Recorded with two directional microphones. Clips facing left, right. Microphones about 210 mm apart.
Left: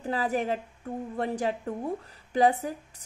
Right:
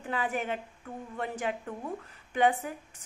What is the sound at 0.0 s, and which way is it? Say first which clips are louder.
A woman's voice: left 4 dB; 35° left (ahead or behind).